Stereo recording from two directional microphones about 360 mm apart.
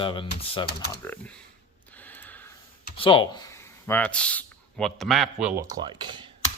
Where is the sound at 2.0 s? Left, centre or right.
Centre.